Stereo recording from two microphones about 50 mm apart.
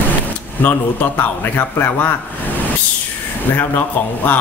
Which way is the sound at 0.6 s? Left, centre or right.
Left.